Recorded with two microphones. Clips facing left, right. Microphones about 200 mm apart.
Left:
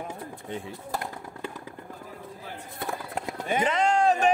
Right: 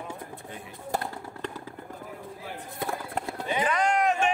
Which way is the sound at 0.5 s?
25° left (ahead or behind).